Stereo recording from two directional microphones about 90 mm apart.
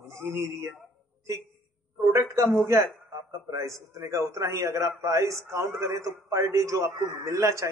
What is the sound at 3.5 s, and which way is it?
A man's voice, 35° right (ahead or behind).